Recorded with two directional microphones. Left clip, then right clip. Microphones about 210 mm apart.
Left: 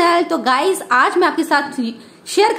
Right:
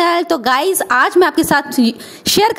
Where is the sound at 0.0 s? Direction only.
40° right (ahead or behind).